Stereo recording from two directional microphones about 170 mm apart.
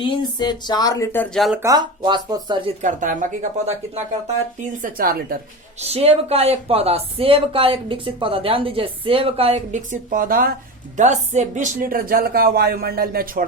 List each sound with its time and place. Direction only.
0.0 s speech: 25° left (ahead or behind); by 1.5 s centre (ahead or behind)
1.6 s speech: 25° right (ahead or behind)
2.8 s speech: 50° right (ahead or behind)
4.6 s speech: 55° right (ahead or behind)
5.8 s speech: 35° right (ahead or behind); by 10.5 s 55° right (ahead or behind)
10.9 s speech: 45° right (ahead or behind); by 13.4 s 60° right (ahead or behind)